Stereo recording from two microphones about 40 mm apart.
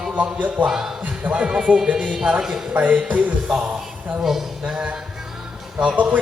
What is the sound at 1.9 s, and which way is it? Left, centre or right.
Speech, right.